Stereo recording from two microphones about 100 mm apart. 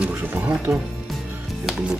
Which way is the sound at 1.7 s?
5° right (ahead or behind).